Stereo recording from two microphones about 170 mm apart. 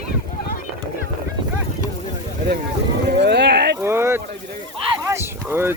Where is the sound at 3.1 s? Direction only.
80° right.